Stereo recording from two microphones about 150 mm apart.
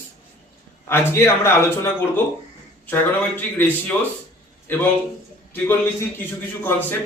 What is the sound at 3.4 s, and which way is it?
A man's voice, 10° left (ahead or behind).